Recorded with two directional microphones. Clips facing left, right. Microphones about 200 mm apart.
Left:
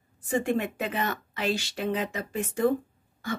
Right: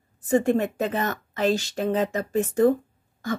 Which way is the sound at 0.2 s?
45° right (ahead or behind).